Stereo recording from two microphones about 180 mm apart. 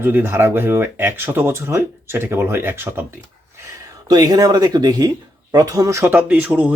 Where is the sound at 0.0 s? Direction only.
10° right (ahead or behind).